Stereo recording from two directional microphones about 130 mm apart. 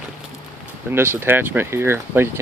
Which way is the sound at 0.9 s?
20° right (ahead or behind).